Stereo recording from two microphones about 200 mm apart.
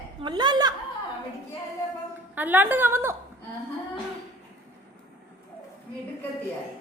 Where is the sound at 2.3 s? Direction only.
10° right (ahead or behind).